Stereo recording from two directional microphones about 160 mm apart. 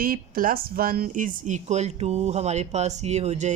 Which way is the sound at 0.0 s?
60° right (ahead or behind).